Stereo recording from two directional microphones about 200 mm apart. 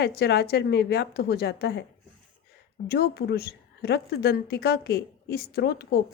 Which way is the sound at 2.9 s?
50° left (ahead or behind).